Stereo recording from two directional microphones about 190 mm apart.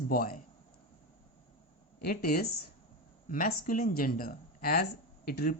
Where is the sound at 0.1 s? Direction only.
50° left (ahead or behind).